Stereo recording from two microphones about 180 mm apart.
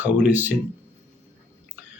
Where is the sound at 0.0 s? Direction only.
10° right (ahead or behind).